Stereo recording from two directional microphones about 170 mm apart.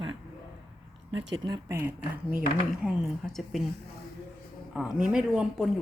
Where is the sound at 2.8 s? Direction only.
Centre (ahead or behind).